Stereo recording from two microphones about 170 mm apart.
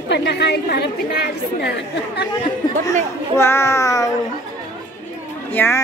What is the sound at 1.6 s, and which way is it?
Speech, 85° left.